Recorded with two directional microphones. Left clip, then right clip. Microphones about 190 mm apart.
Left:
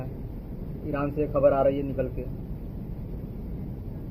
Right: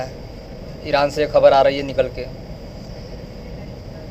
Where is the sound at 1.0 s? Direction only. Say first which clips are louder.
Right 9 dB; 50° right (ahead or behind).